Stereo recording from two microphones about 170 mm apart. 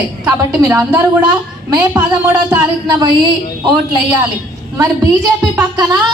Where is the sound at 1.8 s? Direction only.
15° right (ahead or behind).